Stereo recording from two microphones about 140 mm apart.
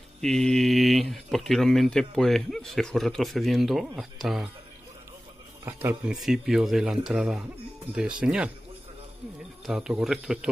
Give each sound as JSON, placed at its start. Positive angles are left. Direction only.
{"t": 0.2, "sound": "speech", "side_deg": 5}
{"t": 5.7, "sound": "speech", "side_deg": -20}
{"t": 6.0, "sound": "speech", "side_deg": -5}
{"t": 9.7, "sound": "speech", "side_deg": -5}